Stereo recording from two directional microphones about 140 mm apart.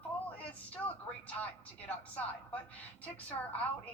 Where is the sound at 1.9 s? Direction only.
10° left (ahead or behind).